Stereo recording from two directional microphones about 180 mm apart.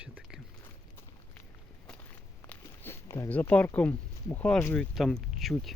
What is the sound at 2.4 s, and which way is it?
Speech, 10° left (ahead or behind).